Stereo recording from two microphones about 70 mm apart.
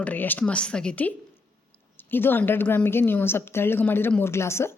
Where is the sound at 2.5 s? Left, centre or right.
Left.